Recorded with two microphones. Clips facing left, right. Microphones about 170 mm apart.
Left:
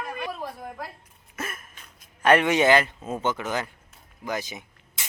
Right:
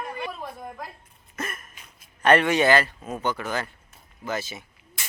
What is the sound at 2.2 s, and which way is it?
Speech, 10° left (ahead or behind).